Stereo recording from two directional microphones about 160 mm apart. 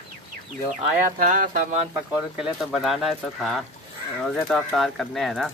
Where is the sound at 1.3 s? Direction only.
55° right (ahead or behind).